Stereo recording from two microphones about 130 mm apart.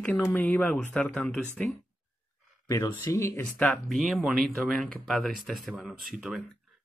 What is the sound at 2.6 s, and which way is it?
Speech, 25° left (ahead or behind).